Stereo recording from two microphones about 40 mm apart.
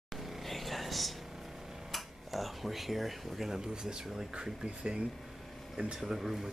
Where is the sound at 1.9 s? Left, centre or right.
Centre.